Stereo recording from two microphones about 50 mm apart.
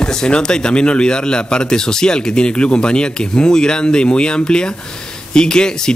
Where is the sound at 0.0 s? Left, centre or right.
Centre.